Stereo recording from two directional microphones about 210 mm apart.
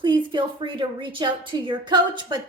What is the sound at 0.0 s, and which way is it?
A woman's voice, 20° right (ahead or behind).